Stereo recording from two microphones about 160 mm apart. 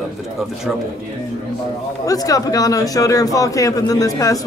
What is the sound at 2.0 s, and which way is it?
A man's voice, 20° left (ahead or behind).